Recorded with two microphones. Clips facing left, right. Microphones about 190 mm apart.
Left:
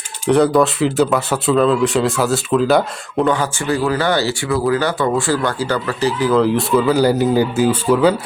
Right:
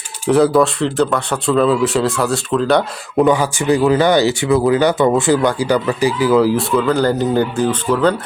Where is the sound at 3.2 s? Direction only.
10° right (ahead or behind); by 8.1 s 10° left (ahead or behind).